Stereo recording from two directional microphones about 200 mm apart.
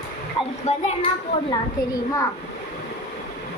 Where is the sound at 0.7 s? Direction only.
35° left (ahead or behind).